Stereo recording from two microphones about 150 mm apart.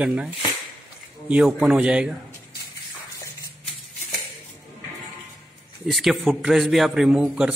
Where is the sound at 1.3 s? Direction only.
5° right (ahead or behind).